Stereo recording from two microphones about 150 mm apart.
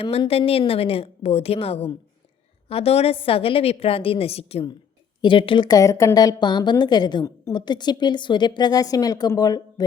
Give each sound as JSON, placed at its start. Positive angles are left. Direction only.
{"t": 0.3, "sound": "a woman's voice", "side_deg": 40}